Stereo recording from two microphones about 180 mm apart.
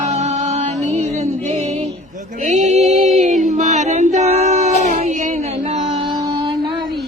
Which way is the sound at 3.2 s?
45° right (ahead or behind).